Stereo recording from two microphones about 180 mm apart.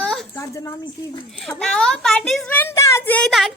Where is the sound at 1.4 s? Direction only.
5° left (ahead or behind).